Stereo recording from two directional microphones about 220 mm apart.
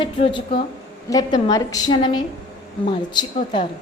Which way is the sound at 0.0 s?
25° left (ahead or behind).